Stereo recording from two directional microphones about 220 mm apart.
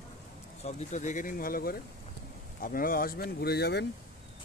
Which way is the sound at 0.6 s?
35° left (ahead or behind).